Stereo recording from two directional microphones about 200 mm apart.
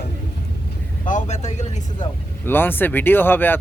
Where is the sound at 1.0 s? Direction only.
35° left (ahead or behind).